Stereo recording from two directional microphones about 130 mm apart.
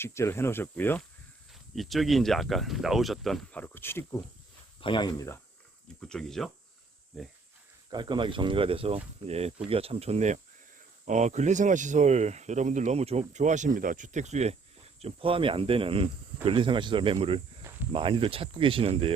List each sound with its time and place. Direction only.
0.0 s speech: 20° left (ahead or behind)
1.7 s speech: centre (ahead or behind)
3.5 s speech: 15° left (ahead or behind)
4.8 s speech: 35° left (ahead or behind)
6.0 s speech: 5° left (ahead or behind)
7.9 s speech: 35° right (ahead or behind); by 14.5 s 60° right (ahead or behind)
15.0 s speech: 45° right (ahead or behind)